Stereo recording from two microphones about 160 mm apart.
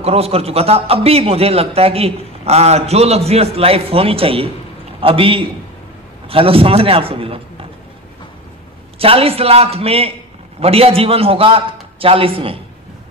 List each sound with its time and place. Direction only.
0.0 s a man's voice: 40° right (ahead or behind)
8.9 s a man's voice: 35° right (ahead or behind)